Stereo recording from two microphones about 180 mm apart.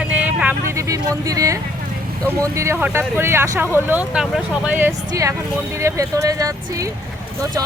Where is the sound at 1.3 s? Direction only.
20° right (ahead or behind).